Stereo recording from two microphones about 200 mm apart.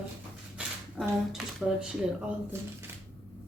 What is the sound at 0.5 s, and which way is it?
Speech, 5° right (ahead or behind).